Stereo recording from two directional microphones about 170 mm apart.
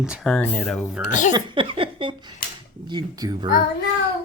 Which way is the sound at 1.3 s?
30° right (ahead or behind).